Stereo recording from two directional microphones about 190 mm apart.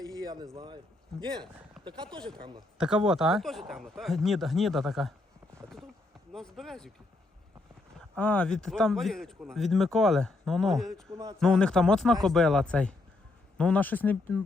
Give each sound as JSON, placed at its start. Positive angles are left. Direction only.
{"t": 0.0, "sound": "a sound", "side_deg": -20}
{"t": 0.5, "sound": "speech", "side_deg": -25}
{"t": 2.7, "sound": "speech", "side_deg": -5}
{"t": 6.3, "sound": "speech", "side_deg": 0}
{"t": 7.9, "sound": "speech", "side_deg": 5}
{"t": 11.1, "sound": "a man's voice", "side_deg": -15}
{"t": 11.3, "sound": "speech", "side_deg": 0}